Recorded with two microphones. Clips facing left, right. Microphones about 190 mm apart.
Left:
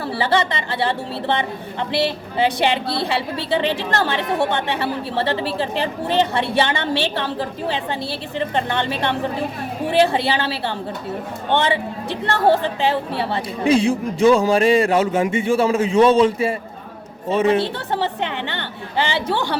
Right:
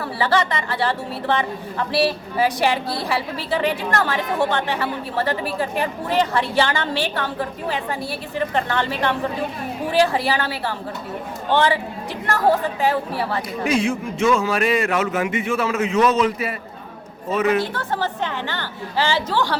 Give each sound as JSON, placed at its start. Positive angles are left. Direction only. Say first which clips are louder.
{"t": 0.0, "sound": "a woman's voice", "louder": "left 1 dB", "side_deg": 25}